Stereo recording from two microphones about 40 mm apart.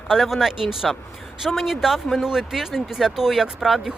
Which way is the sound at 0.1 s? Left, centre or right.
Centre.